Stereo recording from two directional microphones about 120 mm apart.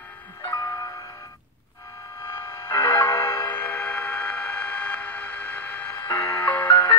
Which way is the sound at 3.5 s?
15° left (ahead or behind).